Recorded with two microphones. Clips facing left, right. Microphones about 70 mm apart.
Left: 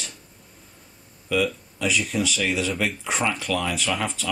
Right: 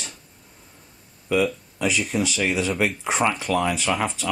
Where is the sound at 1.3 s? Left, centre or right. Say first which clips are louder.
Right 2 dB; centre.